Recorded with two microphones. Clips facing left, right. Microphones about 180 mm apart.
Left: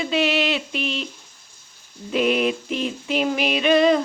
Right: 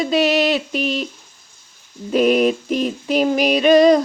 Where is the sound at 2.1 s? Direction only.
40° right (ahead or behind).